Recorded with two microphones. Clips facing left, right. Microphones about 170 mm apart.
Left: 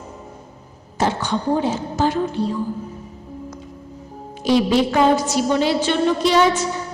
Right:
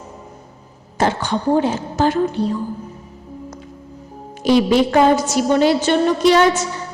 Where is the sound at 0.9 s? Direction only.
50° right (ahead or behind).